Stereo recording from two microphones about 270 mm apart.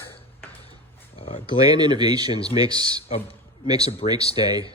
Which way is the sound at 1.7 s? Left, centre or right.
Centre.